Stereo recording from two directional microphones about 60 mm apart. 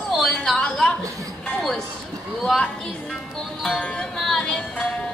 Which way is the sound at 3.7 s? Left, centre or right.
Centre.